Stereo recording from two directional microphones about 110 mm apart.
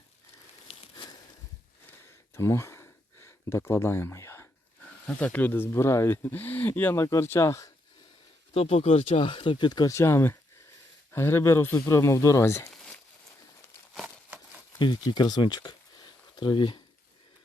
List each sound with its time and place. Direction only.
0.7 s a sound: 50° left (ahead or behind)
2.3 s a sound: 25° left (ahead or behind)
5.0 s speech: 15° left (ahead or behind)
8.5 s speech: 65° left (ahead or behind); by 9.9 s 40° left (ahead or behind)
9.9 s speech: 25° left (ahead or behind)
14.8 s speech: 40° left (ahead or behind)